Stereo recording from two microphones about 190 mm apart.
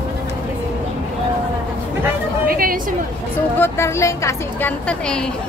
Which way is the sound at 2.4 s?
50° right (ahead or behind).